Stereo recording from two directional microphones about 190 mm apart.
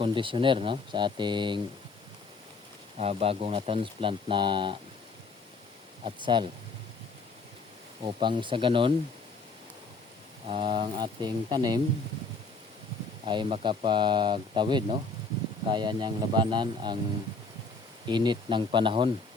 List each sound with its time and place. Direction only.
0.0 s speech: 25° right (ahead or behind)
3.0 s speech: 30° right (ahead or behind)
6.1 s speech: 25° right (ahead or behind)
8.0 s speech: 25° right (ahead or behind)
10.5 s speech: 25° right (ahead or behind)
13.2 s speech: 25° right (ahead or behind)
18.1 s speech: 25° right (ahead or behind)